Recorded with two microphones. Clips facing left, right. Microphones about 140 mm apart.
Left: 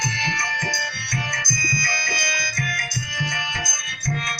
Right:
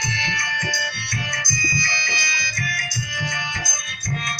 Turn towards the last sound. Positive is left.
turn(degrees=50)  # may be behind; listen again after turning